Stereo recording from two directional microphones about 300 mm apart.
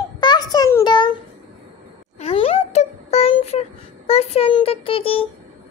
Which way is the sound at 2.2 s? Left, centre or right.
Centre.